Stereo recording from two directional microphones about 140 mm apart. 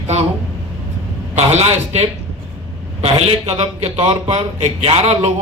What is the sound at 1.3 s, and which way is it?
Speech, 50° right (ahead or behind).